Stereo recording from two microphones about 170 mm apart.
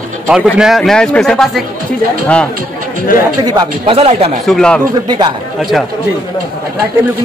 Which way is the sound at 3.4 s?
25° right (ahead or behind).